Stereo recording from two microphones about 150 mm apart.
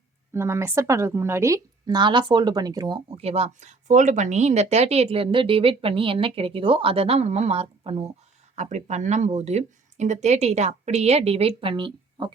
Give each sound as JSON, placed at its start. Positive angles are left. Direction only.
{"t": 0.3, "sound": "a woman's voice", "side_deg": -15}